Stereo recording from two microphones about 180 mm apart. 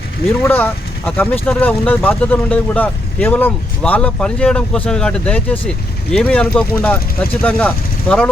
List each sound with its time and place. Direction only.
0.4 s speech: 10° left (ahead or behind)